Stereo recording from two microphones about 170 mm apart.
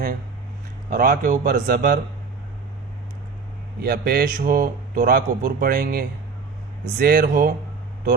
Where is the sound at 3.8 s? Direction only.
65° right (ahead or behind).